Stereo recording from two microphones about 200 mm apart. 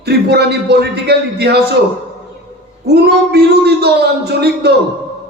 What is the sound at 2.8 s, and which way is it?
A man's voice, 55° right (ahead or behind).